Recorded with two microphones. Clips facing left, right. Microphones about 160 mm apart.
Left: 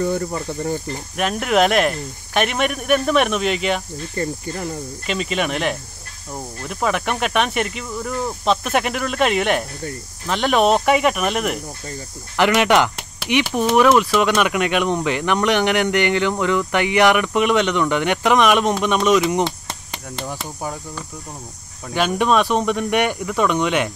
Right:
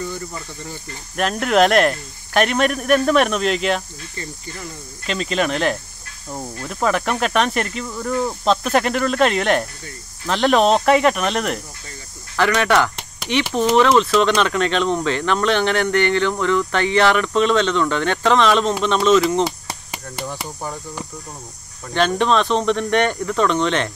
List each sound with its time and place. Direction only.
0.0 s speech: 55° left (ahead or behind)
1.1 s speech: 5° left (ahead or behind)
4.1 s speech: 50° left (ahead or behind)
5.0 s speech: 5° left (ahead or behind)
12.4 s speech: 15° left (ahead or behind)
19.4 s chop: 5° right (ahead or behind)
21.9 s speech: 10° left (ahead or behind)